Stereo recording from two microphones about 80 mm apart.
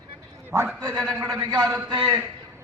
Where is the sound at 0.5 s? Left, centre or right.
Right.